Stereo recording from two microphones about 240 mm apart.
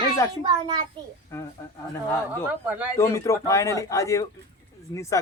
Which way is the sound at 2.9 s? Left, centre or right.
Centre.